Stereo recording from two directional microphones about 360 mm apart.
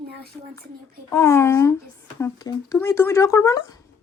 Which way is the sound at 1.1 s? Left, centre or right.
Centre.